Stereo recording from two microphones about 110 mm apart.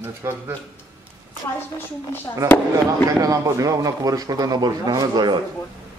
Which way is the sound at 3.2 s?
30° right (ahead or behind).